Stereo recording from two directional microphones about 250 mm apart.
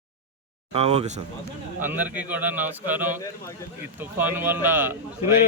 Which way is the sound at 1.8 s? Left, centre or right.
Centre.